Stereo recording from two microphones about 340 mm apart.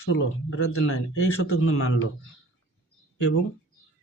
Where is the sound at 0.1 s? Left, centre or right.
Left.